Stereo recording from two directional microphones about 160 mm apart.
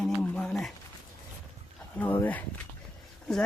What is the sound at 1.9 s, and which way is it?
Speech, 10° left (ahead or behind).